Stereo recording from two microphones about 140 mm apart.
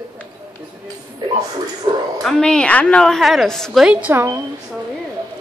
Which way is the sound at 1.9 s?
35° right (ahead or behind).